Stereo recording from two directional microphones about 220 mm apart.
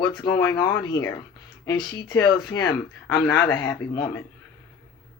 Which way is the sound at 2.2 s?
20° left (ahead or behind).